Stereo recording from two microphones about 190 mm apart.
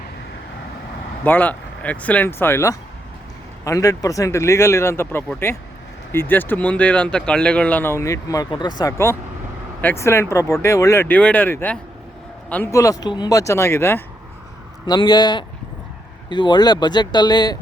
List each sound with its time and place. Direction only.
1.2 s speech: 10° left (ahead or behind)